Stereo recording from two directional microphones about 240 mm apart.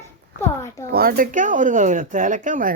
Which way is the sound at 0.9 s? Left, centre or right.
Right.